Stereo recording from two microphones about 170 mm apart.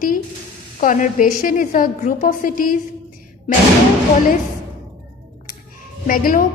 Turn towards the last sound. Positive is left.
turn(degrees=55)  # may be behind; listen again after turning